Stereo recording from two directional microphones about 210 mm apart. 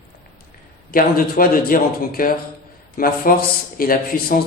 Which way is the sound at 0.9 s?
45° left (ahead or behind).